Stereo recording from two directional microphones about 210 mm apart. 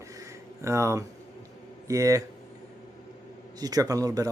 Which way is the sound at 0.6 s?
15° right (ahead or behind).